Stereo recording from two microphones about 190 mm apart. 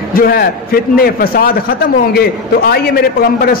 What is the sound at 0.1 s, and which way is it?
A man's voice, 50° left (ahead or behind).